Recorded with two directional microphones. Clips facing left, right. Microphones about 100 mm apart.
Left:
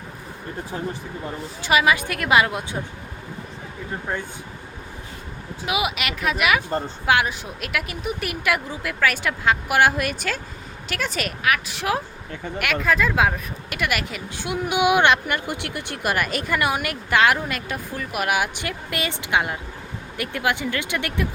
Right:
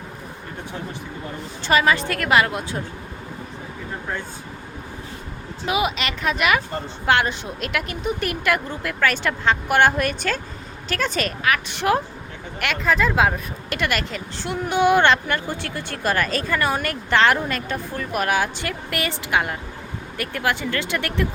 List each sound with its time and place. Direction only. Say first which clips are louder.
1.6 s speech: right 1 dB; 10° left (ahead or behind)
5.6 s a woman's voice: right 2 dB; 5° left (ahead or behind)